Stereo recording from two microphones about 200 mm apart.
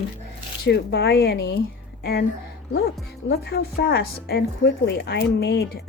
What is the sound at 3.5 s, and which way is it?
A woman's voice, 50° left (ahead or behind).